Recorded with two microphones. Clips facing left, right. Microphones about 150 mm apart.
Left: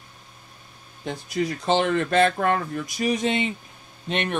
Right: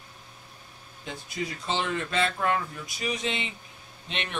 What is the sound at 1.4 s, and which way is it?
Speech, 50° left (ahead or behind).